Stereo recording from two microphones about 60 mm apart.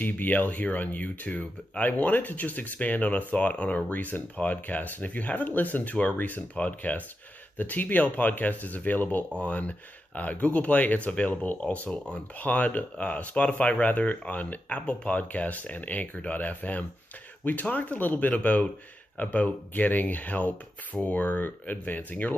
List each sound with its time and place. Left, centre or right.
0.0 s speech: left